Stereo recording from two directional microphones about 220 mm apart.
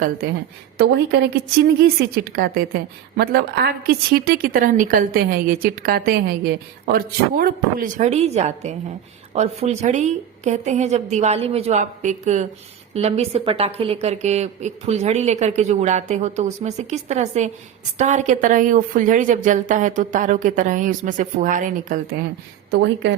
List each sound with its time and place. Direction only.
0.2 s a woman's voice: 45° right (ahead or behind)